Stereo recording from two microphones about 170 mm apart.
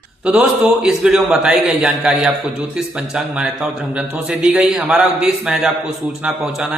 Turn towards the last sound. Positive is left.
turn(degrees=-5)  # may be behind; listen again after turning